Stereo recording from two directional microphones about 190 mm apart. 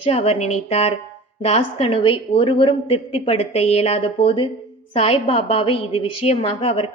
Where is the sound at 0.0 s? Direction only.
30° left (ahead or behind).